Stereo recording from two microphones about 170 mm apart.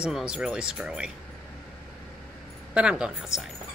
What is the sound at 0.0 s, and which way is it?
Speech, 5° right (ahead or behind).